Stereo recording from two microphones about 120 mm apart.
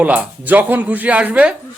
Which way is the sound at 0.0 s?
15° right (ahead or behind).